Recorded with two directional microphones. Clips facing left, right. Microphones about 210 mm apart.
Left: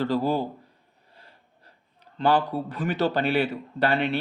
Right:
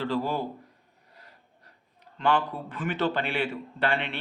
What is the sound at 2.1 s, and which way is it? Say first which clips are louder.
A man's voice: left 4 dB; 35° left (ahead or behind).